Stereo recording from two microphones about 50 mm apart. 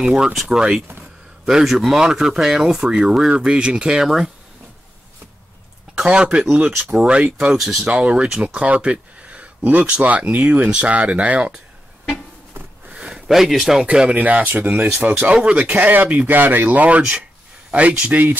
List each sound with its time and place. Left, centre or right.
0.0 s speech: centre
5.9 s speech: centre
7.5 s speech: centre
7.9 s speech: right
12.6 s a sound: right
12.9 s a sound: centre
13.3 s speech: centre
13.8 s speech: right
15.3 s speech: right